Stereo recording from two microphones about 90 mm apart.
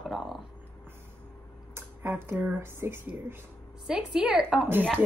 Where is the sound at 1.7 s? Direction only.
25° right (ahead or behind).